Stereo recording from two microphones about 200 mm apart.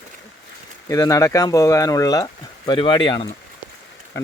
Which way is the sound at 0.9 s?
15° left (ahead or behind).